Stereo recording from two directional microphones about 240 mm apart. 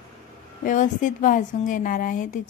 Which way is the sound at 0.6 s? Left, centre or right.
Left.